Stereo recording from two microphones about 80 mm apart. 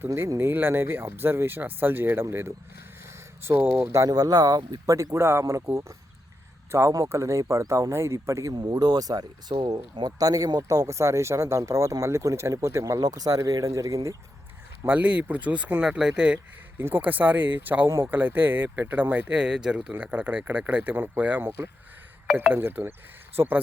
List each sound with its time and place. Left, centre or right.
0.1 s speech: right
0.3 s speech: right
4.1 s a man's voice: right
8.5 s speech: right
9.9 s speech: right
14.8 s speech: centre
16.7 s speech: right
17.8 s speech: right
18.1 s speech: right
19.9 s speech: right